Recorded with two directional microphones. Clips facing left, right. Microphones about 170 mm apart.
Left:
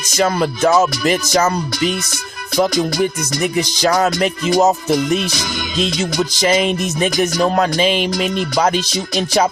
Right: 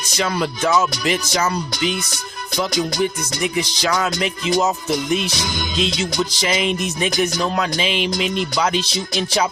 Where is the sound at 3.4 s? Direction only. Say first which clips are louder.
Left 4 dB; 45° left (ahead or behind).